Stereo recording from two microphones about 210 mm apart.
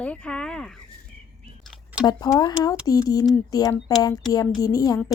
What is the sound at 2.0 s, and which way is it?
Speech, 20° left (ahead or behind).